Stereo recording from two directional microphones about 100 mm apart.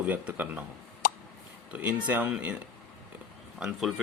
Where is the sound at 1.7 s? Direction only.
15° right (ahead or behind).